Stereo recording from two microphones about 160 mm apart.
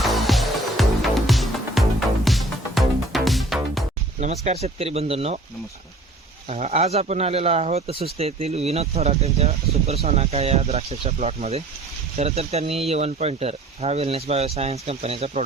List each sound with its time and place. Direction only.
0.0 s music: centre (ahead or behind)
4.2 s speech: 45° right (ahead or behind)
6.5 s speech: 40° right (ahead or behind)